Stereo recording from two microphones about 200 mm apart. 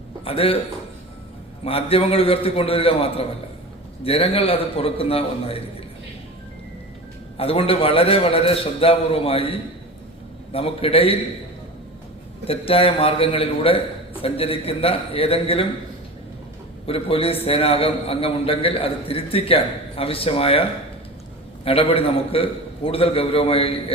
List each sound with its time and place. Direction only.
0.3 s a man's voice: 30° left (ahead or behind)
1.6 s a man's voice: 30° left (ahead or behind)
7.3 s a man's voice: 30° left (ahead or behind)
12.5 s a man's voice: 30° left (ahead or behind)
16.8 s a man's voice: 30° left (ahead or behind)